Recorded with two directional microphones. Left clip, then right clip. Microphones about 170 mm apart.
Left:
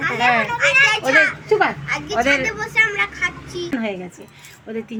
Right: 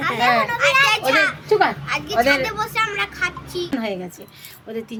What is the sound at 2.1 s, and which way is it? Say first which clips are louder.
Speech: right 1 dB; 15° left (ahead or behind).